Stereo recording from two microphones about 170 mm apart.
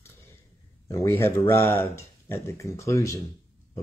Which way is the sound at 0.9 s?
15° left (ahead or behind).